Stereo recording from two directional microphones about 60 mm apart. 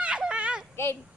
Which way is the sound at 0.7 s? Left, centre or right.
Left.